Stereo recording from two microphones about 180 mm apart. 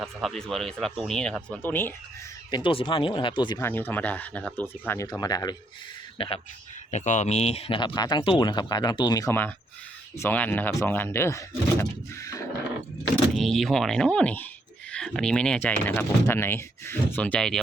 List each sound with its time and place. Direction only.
0.0 s speech: centre (ahead or behind)
2.5 s speech: 25° left (ahead or behind)
3.6 s speech: 10° left (ahead or behind); by 6.4 s 30° left (ahead or behind)
6.9 s speech: 40° left (ahead or behind); by 12.4 s 15° left (ahead or behind)
13.3 s speech: centre (ahead or behind)